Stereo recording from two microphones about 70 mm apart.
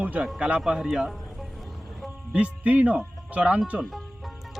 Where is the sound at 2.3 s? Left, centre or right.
Centre.